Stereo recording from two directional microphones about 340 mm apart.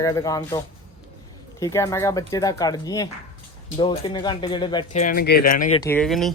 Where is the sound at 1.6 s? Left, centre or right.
Centre.